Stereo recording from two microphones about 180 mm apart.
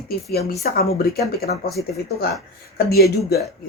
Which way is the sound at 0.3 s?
60° left (ahead or behind).